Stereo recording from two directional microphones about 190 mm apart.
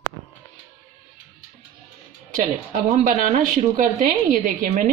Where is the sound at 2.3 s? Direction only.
40° right (ahead or behind).